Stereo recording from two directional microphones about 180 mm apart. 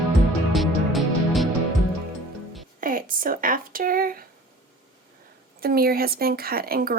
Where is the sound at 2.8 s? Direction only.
50° right (ahead or behind).